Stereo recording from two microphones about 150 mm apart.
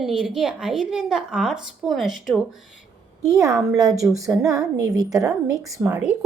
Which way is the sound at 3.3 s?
20° right (ahead or behind).